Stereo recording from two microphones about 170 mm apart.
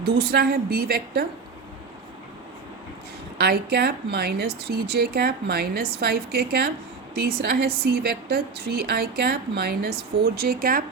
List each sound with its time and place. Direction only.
0.0 s a woman's voice: 70° right (ahead or behind)
3.3 s a woman's voice: 70° right (ahead or behind)